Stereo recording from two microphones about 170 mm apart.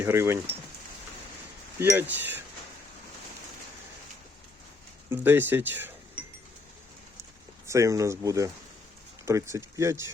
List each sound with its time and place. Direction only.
0.0 s speech: 15° right (ahead or behind)
1.8 s speech: 15° right (ahead or behind)
5.0 s speech: 10° right (ahead or behind)
7.7 s speech: 20° right (ahead or behind)